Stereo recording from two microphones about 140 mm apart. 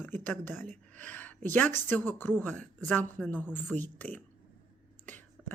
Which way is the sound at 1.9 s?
15° left (ahead or behind).